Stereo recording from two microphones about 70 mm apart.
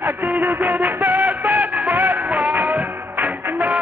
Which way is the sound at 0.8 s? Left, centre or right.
Right.